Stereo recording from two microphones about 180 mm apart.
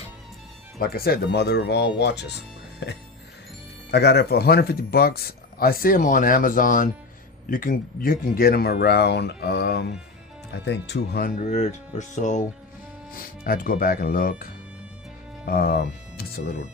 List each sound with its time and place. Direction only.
0.8 s speech: 55° left (ahead or behind); by 3.0 s 75° left (ahead or behind)
3.9 s speech: 65° left (ahead or behind)
11.3 s speech: 45° left (ahead or behind)
13.1 s speech: 55° left (ahead or behind)